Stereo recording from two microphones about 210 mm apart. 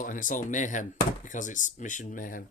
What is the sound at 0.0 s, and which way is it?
Speech, 40° left (ahead or behind).